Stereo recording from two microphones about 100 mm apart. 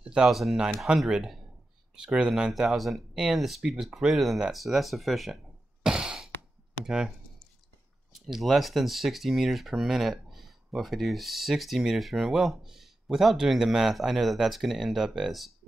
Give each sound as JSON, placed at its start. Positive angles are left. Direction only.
{"t": 0.0, "sound": "speech", "side_deg": -10}
{"t": 6.8, "sound": "computer keyboard", "side_deg": -5}
{"t": 8.1, "sound": "speech", "side_deg": 0}